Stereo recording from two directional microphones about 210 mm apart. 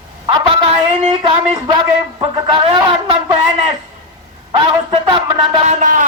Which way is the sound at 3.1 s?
20° right (ahead or behind).